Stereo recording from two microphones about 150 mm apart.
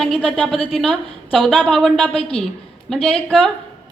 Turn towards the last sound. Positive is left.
turn(degrees=5)  # may be behind; listen again after turning